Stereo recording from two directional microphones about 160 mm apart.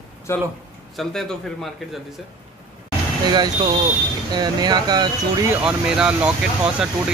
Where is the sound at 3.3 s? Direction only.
25° right (ahead or behind).